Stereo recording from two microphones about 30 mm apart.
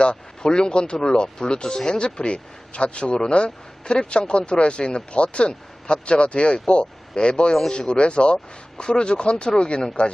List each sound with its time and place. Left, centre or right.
0.0 s speech: left